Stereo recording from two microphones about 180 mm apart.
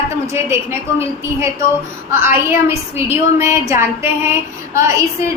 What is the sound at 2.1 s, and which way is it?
Female singing, 15° right (ahead or behind).